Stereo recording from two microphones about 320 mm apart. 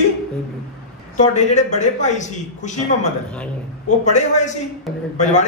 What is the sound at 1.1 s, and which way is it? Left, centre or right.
A man's voice, left.